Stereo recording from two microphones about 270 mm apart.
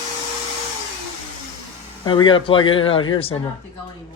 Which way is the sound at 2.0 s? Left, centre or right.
Centre.